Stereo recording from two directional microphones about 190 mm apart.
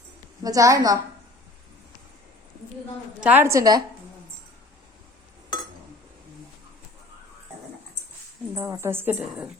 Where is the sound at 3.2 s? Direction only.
10° right (ahead or behind).